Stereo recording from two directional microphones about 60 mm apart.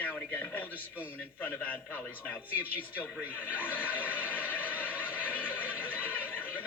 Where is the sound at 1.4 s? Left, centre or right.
Left.